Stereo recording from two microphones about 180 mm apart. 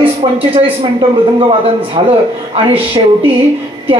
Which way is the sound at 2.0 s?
30° right (ahead or behind).